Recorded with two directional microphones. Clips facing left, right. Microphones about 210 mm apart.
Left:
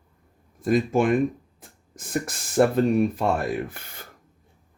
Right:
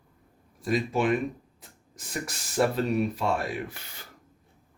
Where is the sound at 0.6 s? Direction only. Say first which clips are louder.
Left 5 dB; 50° left (ahead or behind).